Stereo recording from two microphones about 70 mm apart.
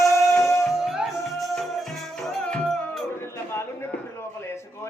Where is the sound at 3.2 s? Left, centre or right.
Left.